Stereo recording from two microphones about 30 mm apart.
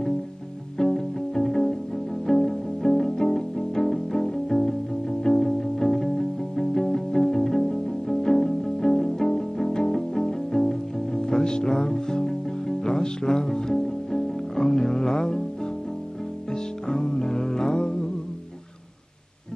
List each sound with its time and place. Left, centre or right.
0.7 s music: centre
16.8 s music: left